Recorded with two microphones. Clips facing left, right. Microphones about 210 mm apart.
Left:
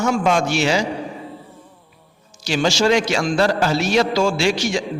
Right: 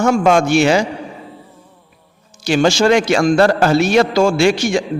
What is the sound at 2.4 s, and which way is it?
A man's voice, 55° right (ahead or behind).